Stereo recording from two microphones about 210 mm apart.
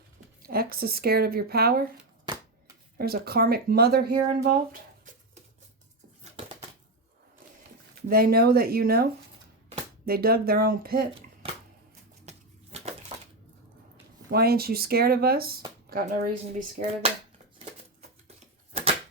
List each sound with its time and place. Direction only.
0.4 s speech: 45° right (ahead or behind)
3.0 s speech: 45° right (ahead or behind)
8.0 s speech: 45° right (ahead or behind)
10.1 s speech: 45° right (ahead or behind)
12.2 s a sound: 30° right (ahead or behind)
13.9 s speech: 50° right (ahead or behind)
18.7 s a sound: 30° right (ahead or behind)